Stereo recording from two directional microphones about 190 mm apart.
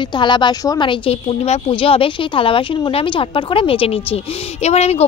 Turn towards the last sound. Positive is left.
turn(degrees=35)  # may be behind; listen again after turning